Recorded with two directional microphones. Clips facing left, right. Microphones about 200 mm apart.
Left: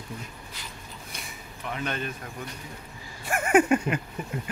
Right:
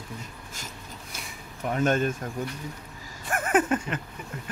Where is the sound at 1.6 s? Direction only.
45° right (ahead or behind).